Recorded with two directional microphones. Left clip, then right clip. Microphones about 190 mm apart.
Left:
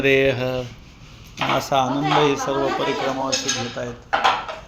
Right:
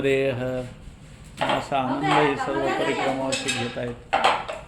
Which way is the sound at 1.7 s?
45° left (ahead or behind).